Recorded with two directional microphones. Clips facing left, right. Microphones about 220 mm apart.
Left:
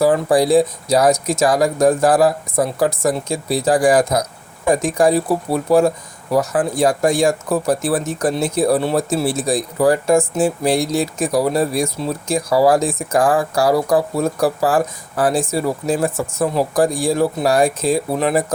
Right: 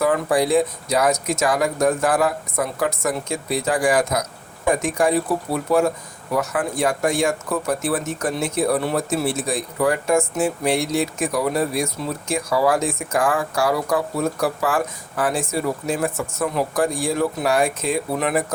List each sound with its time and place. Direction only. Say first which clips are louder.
0.0 s speech: left 5 dB; 35° left (ahead or behind)